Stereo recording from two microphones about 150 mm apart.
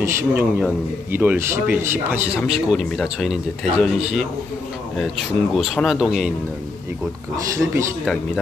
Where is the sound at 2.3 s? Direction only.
5° right (ahead or behind).